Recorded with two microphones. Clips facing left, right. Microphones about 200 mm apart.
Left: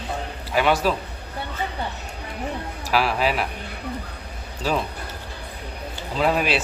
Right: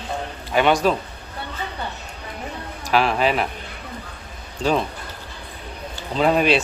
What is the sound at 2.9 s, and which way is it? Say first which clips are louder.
Speech: right 3 dB; 5° left (ahead or behind).